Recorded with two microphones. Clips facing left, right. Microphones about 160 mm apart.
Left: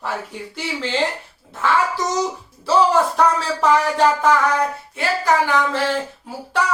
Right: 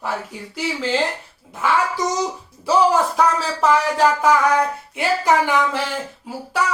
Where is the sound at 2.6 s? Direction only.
5° right (ahead or behind).